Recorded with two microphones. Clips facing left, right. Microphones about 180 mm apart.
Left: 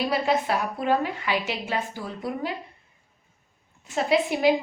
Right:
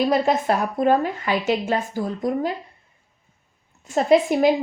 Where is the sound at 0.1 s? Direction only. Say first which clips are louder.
Right 4 dB; 45° right (ahead or behind).